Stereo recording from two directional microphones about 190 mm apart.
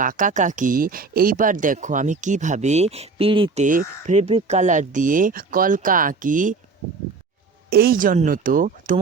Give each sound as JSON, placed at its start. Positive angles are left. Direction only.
{"t": 0.0, "sound": "speech", "side_deg": -45}
{"t": 7.7, "sound": "speech", "side_deg": -55}